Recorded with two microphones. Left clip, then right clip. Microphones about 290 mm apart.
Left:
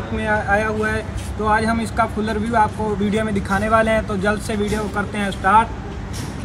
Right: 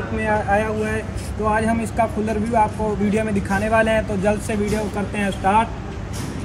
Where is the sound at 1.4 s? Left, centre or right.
Centre.